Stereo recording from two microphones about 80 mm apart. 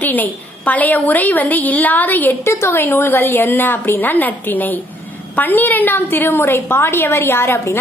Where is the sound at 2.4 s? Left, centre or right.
Left.